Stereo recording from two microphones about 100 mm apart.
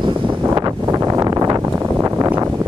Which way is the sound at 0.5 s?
35° right (ahead or behind).